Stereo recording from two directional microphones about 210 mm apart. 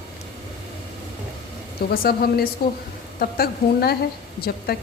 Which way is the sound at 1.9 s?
45° left (ahead or behind).